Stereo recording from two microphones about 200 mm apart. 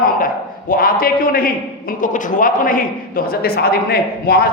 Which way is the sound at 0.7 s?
45° left (ahead or behind).